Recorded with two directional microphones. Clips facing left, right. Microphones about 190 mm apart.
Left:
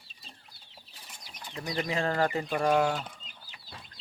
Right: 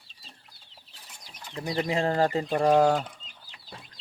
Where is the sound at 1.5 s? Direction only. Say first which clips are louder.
Right 4 dB; 25° right (ahead or behind).